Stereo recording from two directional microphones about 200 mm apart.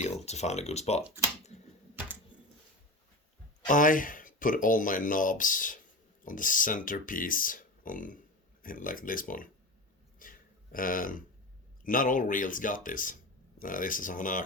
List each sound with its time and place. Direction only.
0.0 s speech: 35° left (ahead or behind)
1.0 s speech: 10° right (ahead or behind)
3.7 s speech: 40° left (ahead or behind)
10.2 s a sound: 45° left (ahead or behind)
11.8 s speech: 45° left (ahead or behind)